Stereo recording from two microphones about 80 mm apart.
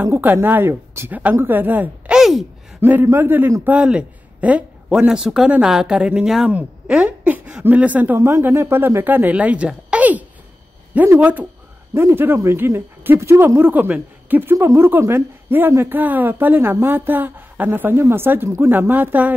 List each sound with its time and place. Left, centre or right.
0.2 s speech: right
2.1 s a sound: centre
2.8 s a woman's voice: right
8.2 s speech: right
11.9 s speech: right